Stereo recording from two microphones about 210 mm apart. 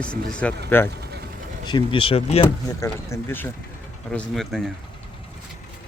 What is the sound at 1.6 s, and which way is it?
Speech, 25° left (ahead or behind).